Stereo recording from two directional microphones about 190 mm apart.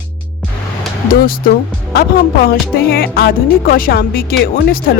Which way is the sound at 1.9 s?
50° left (ahead or behind).